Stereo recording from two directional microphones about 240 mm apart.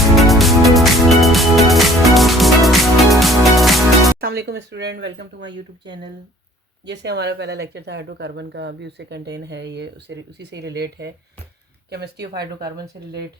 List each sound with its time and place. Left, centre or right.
0.2 s music: centre
4.2 s speech: right
6.8 s speech: right
12.5 s speech: centre